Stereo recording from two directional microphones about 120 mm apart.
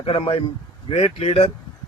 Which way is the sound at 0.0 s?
50° left (ahead or behind).